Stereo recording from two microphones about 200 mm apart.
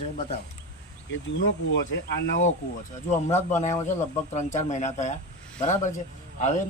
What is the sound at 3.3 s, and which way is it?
Speech, 35° left (ahead or behind).